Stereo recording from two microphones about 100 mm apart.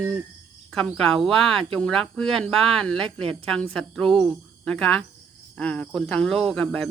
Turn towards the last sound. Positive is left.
turn(degrees=0)  # may be behind; listen again after turning